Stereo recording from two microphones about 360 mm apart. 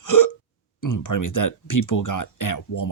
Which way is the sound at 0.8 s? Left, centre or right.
Left.